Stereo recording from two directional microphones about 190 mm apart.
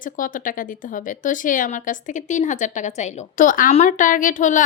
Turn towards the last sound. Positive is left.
turn(degrees=40)  # may be behind; listen again after turning